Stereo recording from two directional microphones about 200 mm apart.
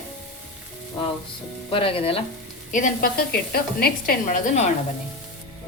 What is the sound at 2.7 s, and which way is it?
A woman's voice, 40° left (ahead or behind).